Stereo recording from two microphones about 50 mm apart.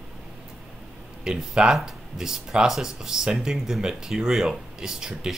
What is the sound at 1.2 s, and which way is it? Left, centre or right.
Speech, centre.